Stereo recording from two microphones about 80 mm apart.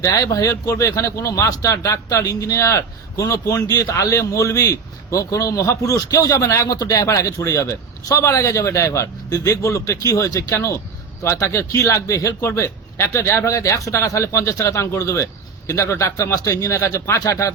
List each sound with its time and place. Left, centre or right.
0.0 s a man's voice: left
3.9 s a man's voice: left